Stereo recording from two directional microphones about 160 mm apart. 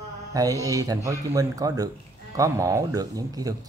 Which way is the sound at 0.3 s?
20° right (ahead or behind).